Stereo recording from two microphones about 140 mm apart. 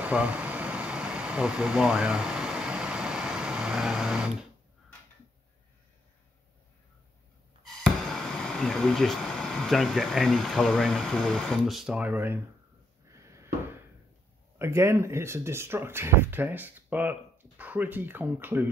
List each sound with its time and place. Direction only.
0.0 s air conditioning: 10° right (ahead or behind)
7.6 s speech: centre (ahead or behind); by 12.4 s 15° right (ahead or behind)
13.1 s a sound: 20° right (ahead or behind)
14.6 s speech: 20° right (ahead or behind)